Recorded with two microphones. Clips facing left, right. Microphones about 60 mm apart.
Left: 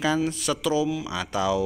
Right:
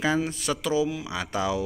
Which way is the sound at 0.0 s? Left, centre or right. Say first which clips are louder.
Left 1 dB; right.